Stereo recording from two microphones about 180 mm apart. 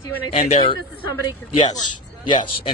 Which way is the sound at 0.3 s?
35° left (ahead or behind).